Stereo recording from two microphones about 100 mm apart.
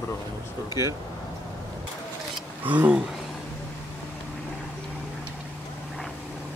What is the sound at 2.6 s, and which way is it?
Speech, 15° right (ahead or behind).